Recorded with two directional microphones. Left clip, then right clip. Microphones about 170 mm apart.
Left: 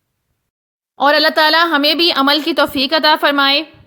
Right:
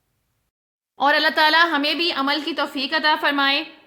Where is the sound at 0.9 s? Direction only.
30° left (ahead or behind).